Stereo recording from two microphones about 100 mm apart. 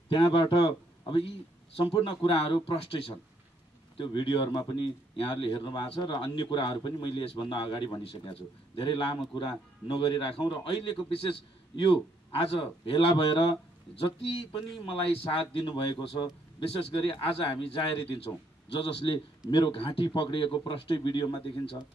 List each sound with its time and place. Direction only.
0.1 s speech: 60° left (ahead or behind)
1.9 s speech: 65° left (ahead or behind)
4.0 s a man's voice: 50° left (ahead or behind)